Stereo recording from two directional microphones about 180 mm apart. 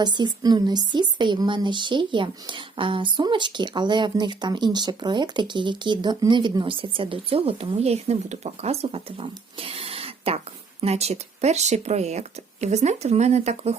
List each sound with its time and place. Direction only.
0.0 s speech: 25° right (ahead or behind)